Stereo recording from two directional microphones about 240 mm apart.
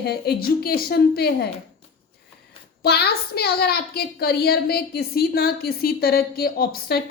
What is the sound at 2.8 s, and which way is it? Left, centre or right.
A child's voice, left.